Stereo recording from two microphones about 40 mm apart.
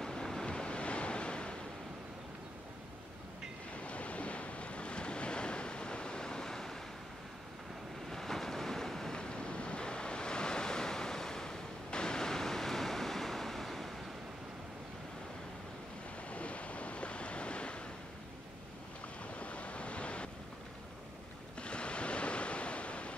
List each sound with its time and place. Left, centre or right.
0.0 s waves: centre
0.5 s waves: left
3.7 s waves: left; by 6.8 s centre
8.1 s train: centre
9.1 s waves: left; by 13.9 s centre
16.3 s waves: left
19.3 s waves: left
21.5 s waves: left